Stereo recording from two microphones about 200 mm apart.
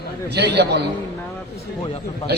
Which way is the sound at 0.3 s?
55° right (ahead or behind).